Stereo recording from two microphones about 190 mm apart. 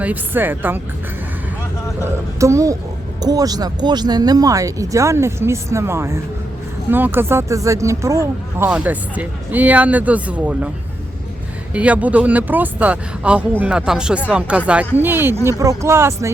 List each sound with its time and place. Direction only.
0.0 s speech: 10° right (ahead or behind)
2.4 s speech: 15° right (ahead or behind)
11.7 s speech: 5° right (ahead or behind)